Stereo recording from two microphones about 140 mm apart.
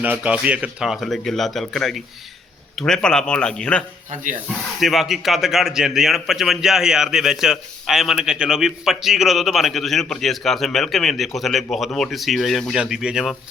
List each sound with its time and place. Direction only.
0.0 s a man's voice: 10° right (ahead or behind); by 3.8 s 5° left (ahead or behind)
4.1 s speech: 65° right (ahead or behind)
4.8 s a man's voice: centre (ahead or behind)